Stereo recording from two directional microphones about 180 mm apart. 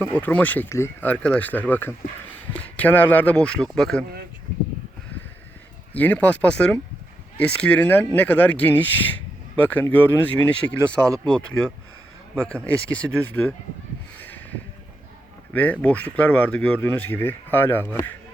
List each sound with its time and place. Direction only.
0.0 s speech: 10° left (ahead or behind)
5.9 s speech: 10° left (ahead or behind)
14.2 s a sound: 10° left (ahead or behind)
15.5 s speech: 10° left (ahead or behind)